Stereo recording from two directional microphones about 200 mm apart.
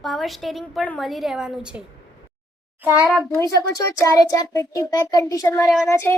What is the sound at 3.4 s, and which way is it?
A child's voice, 15° left (ahead or behind).